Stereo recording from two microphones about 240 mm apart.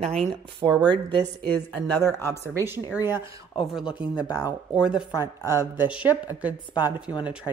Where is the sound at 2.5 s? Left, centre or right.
Centre.